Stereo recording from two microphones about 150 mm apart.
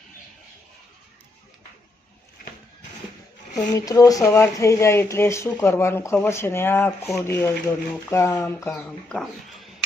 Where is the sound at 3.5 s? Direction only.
25° left (ahead or behind).